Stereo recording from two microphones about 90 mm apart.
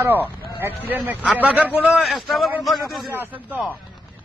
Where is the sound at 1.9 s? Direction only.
Centre (ahead or behind).